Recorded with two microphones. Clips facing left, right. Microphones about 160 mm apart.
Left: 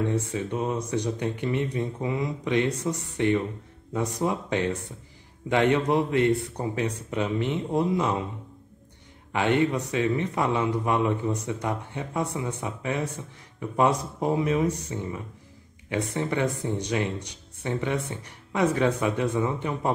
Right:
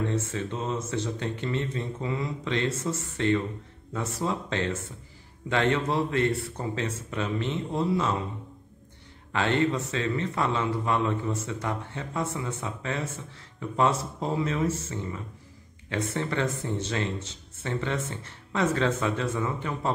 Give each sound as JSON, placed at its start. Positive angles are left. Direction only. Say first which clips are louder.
{"t": 0.3, "sound": "a man's voice", "louder": "left 3 dB", "side_deg": 15}
{"t": 9.3, "sound": "a man's voice", "louder": "left 2 dB", "side_deg": 15}